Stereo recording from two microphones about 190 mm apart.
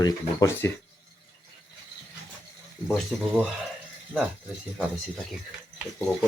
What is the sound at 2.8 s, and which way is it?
Speech, centre (ahead or behind).